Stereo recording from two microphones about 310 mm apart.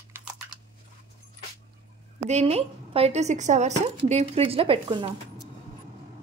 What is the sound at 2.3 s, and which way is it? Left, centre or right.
Speech, centre.